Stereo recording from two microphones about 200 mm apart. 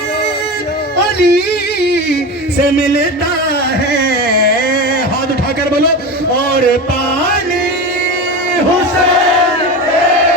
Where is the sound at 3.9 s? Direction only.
50° left (ahead or behind).